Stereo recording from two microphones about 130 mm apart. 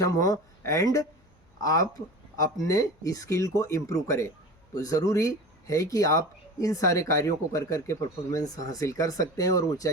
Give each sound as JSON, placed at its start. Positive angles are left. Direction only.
{"t": 0.6, "sound": "speech", "side_deg": 25}